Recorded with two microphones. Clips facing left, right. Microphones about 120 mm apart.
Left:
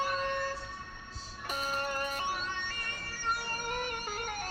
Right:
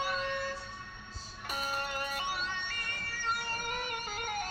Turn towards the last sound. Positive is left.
turn(degrees=45)  # may be behind; listen again after turning